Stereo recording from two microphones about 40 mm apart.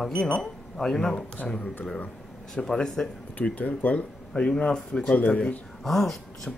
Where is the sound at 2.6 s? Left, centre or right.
Centre.